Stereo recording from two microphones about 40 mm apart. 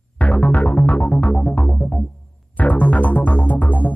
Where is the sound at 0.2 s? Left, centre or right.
Left.